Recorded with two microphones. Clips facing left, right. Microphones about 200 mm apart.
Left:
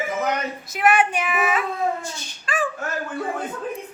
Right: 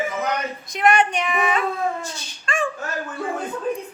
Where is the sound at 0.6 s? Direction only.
5° left (ahead or behind).